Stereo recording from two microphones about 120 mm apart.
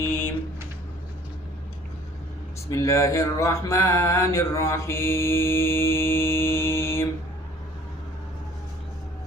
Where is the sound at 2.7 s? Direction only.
25° left (ahead or behind).